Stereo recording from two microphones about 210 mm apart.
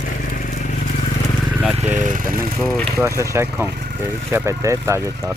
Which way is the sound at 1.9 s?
40° right (ahead or behind).